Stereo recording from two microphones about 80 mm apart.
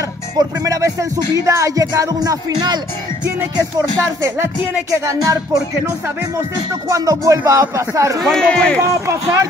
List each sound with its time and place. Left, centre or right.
0.4 s music: right
4.9 s speech: right
6.9 s music: right
7.7 s speech: right
8.2 s speech: centre
8.8 s speech: right